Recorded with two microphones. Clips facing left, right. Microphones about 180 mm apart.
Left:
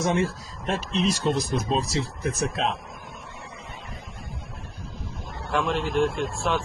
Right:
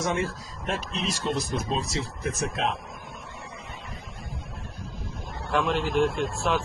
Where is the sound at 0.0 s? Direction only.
30° left (ahead or behind).